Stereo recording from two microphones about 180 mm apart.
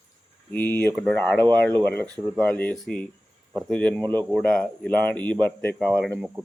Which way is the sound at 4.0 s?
25° right (ahead or behind).